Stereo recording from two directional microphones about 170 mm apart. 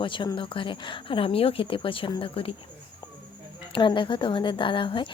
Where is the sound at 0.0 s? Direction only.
30° left (ahead or behind).